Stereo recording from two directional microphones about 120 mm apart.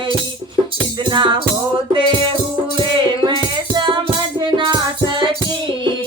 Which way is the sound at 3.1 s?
40° right (ahead or behind).